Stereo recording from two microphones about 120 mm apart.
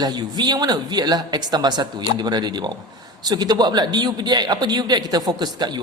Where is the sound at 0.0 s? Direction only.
35° right (ahead or behind).